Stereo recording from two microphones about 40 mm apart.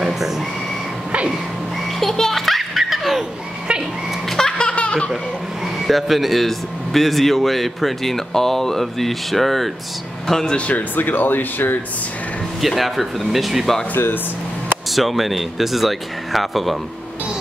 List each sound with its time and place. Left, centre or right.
2.0 s music: centre
2.7 s laughter: centre
4.3 s laughter: centre
4.6 s laughter: left
5.9 s speech: centre
10.7 s speech: left
12.6 s speech: centre
14.9 s speech: centre